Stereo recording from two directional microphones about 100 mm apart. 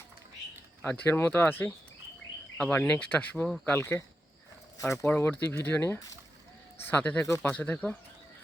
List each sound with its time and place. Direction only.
0.8 s speech: 15° left (ahead or behind)
2.8 s speech: 15° left (ahead or behind)
7.3 s speech: 25° left (ahead or behind)
7.5 s speech: 15° left (ahead or behind)